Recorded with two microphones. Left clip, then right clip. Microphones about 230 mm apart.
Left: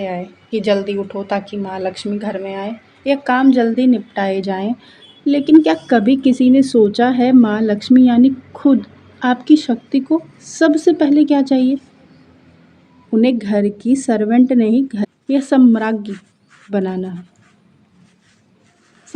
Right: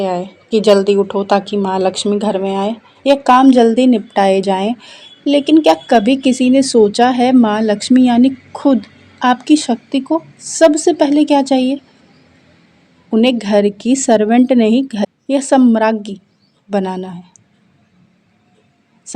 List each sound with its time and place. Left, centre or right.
0.0 s a woman's voice: right
13.1 s a woman's voice: right